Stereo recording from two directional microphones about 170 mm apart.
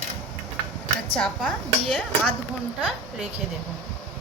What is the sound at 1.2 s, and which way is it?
Speech, centre (ahead or behind).